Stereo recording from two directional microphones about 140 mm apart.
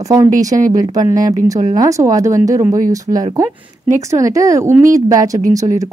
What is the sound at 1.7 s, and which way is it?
Speech, 25° right (ahead or behind).